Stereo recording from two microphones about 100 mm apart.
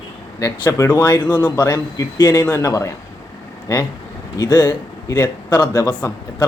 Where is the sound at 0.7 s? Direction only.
20° left (ahead or behind).